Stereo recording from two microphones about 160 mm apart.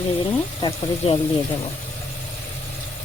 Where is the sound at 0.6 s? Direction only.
35° left (ahead or behind).